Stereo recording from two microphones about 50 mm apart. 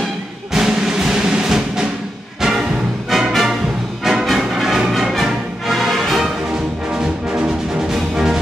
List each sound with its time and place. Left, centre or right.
0.5 s music: centre
3.1 s music: centre
6.9 s music: centre